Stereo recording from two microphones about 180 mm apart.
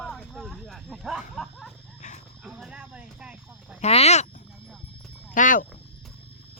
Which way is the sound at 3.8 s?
35° left (ahead or behind).